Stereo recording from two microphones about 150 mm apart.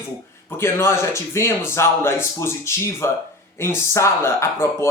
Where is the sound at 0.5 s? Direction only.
15° left (ahead or behind).